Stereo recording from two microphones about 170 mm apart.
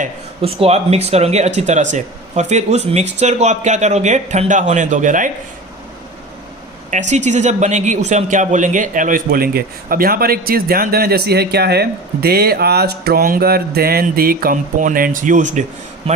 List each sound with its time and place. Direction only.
0.4 s speech: 35° right (ahead or behind)
6.9 s speech: 45° right (ahead or behind)
16.1 s a man's voice: 35° right (ahead or behind)